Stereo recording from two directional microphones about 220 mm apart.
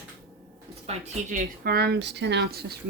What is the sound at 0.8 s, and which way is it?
Speech, 35° right (ahead or behind).